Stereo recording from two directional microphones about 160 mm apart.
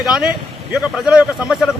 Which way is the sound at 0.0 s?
5° right (ahead or behind).